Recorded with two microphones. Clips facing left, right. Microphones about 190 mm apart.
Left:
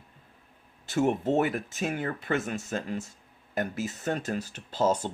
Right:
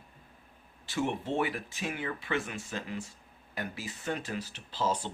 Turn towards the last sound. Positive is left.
turn(degrees=45)  # may be behind; listen again after turning